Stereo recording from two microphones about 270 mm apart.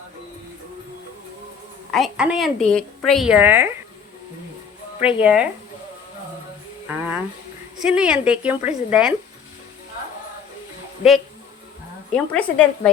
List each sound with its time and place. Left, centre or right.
1.9 s a woman's voice: centre
4.9 s a woman's voice: centre
6.8 s music: centre
7.8 s a woman's voice: centre
12.1 s a woman's voice: centre